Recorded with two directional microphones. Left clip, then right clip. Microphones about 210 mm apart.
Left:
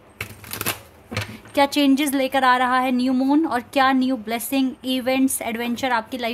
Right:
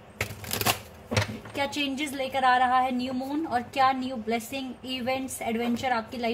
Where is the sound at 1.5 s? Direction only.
50° left (ahead or behind).